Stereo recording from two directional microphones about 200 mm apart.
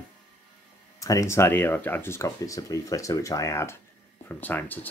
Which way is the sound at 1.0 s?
15° left (ahead or behind).